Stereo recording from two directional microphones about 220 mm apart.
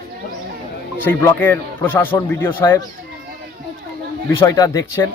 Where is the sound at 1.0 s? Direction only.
10° left (ahead or behind).